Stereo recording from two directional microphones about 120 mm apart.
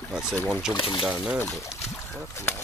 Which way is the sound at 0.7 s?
45° left (ahead or behind).